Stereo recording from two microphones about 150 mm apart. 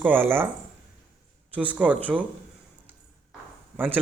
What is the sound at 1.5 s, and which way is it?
Speech, 10° right (ahead or behind).